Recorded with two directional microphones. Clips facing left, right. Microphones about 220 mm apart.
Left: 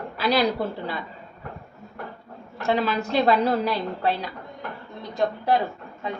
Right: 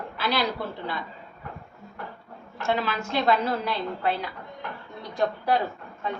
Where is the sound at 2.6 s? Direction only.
35° left (ahead or behind).